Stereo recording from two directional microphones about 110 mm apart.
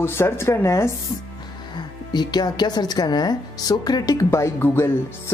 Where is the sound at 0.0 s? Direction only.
25° left (ahead or behind).